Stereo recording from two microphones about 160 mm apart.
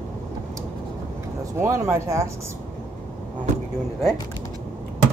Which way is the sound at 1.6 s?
20° right (ahead or behind).